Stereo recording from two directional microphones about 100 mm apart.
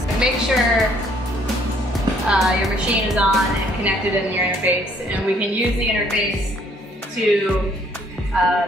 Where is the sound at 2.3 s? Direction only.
Centre (ahead or behind).